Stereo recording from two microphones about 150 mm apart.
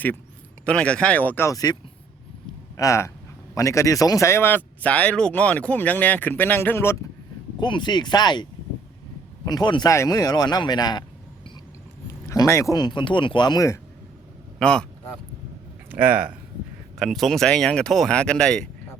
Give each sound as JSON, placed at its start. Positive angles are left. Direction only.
{"t": 0.6, "sound": "speech", "side_deg": 5}
{"t": 2.7, "sound": "speech", "side_deg": 20}
{"t": 7.6, "sound": "speech", "side_deg": 30}
{"t": 12.3, "sound": "speech", "side_deg": 20}
{"t": 14.6, "sound": "speech", "side_deg": 5}
{"t": 15.9, "sound": "speech", "side_deg": -10}
{"t": 17.0, "sound": "speech", "side_deg": 0}